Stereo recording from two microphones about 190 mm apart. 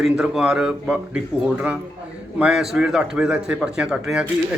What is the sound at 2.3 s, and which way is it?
Speech, 5° right (ahead or behind).